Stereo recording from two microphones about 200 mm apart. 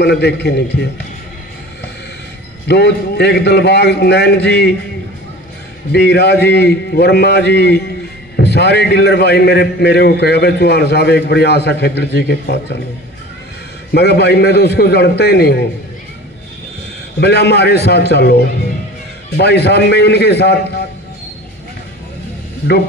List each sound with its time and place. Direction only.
0.0 s a man's voice: 55° left (ahead or behind)
2.7 s a man's voice: 55° left (ahead or behind)
5.9 s a man's voice: 55° left (ahead or behind)
13.9 s a man's voice: 55° left (ahead or behind)
17.2 s a man's voice: 55° left (ahead or behind)